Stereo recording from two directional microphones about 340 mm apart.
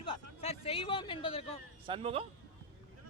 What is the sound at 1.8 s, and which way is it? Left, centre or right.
Speech, centre.